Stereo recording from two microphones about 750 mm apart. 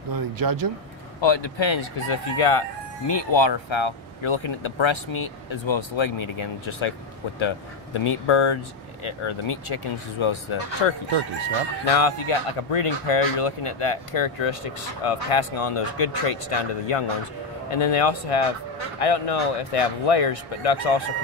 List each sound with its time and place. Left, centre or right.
0.1 s speech: right
1.2 s speech: left
3.1 s speech: left